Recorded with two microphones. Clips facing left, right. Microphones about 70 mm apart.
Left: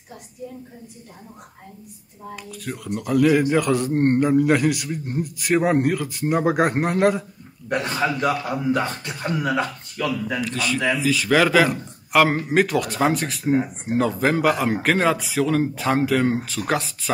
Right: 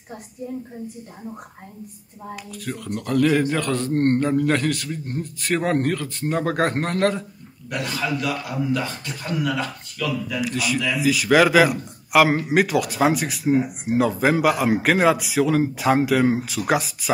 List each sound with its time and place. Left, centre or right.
2.3 s a man's voice: centre
7.7 s a man's voice: left
10.4 s a man's voice: centre